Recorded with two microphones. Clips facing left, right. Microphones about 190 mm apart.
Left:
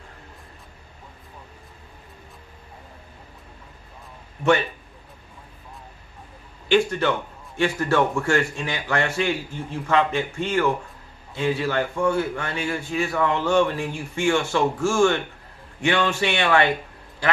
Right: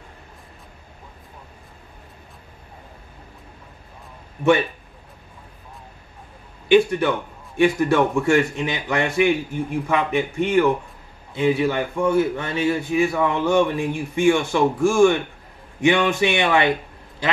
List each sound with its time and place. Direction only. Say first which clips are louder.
6.7 s a man's voice: right 4 dB; 15° right (ahead or behind)